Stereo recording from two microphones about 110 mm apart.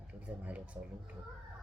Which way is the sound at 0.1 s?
10° right (ahead or behind).